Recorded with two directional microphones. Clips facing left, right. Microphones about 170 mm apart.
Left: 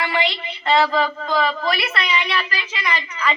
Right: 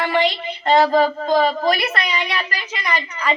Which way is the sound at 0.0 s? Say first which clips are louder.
Right 4 dB; 40° right (ahead or behind).